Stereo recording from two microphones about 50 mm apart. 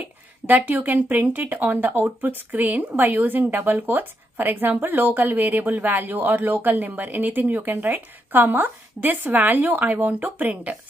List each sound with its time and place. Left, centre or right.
0.5 s speech: right